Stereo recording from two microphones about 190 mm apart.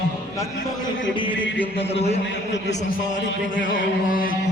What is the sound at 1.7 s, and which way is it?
Speech, 35° left (ahead or behind).